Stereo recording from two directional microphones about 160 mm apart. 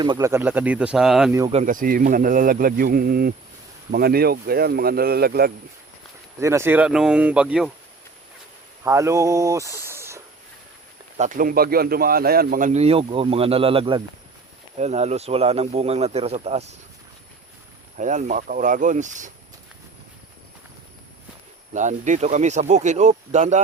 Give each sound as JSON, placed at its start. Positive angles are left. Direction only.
{"t": 0.0, "sound": "speech", "side_deg": -25}
{"t": 1.6, "sound": "speech", "side_deg": -60}
{"t": 6.4, "sound": "speech", "side_deg": -15}
{"t": 8.8, "sound": "speech", "side_deg": -20}
{"t": 11.2, "sound": "speech", "side_deg": -55}
{"t": 12.8, "sound": "speech", "side_deg": -35}
{"t": 14.8, "sound": "speech", "side_deg": -45}
{"t": 17.9, "sound": "speech", "side_deg": -50}
{"t": 21.7, "sound": "speech", "side_deg": -50}